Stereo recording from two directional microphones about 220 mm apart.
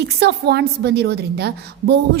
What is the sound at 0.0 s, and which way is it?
A woman's voice, 50° right (ahead or behind).